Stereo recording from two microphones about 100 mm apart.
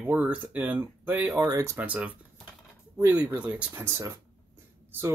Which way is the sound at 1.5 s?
30° right (ahead or behind).